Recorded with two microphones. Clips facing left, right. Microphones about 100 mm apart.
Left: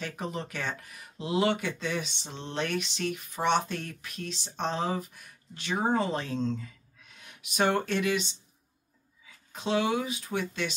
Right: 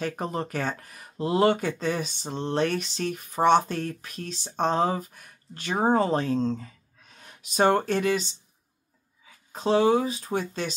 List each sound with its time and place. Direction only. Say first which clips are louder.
0.0 s speech: right 6 dB; 45° right (ahead or behind)
9.5 s speech: right 7 dB; 40° right (ahead or behind)